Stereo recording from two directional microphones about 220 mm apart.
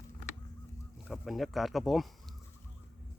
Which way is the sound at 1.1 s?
Centre (ahead or behind).